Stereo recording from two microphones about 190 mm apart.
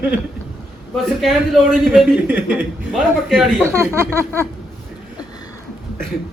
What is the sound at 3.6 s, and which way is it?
Speech, 15° right (ahead or behind).